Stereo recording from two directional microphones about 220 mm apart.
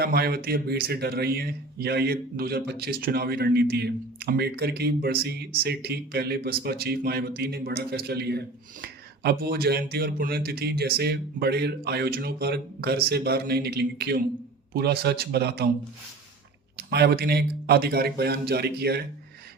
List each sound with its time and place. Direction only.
0.0 s speech: 45° right (ahead or behind)
16.7 s speech: 45° right (ahead or behind)